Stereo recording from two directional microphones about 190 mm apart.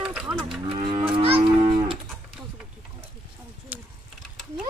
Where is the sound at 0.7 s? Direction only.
25° right (ahead or behind).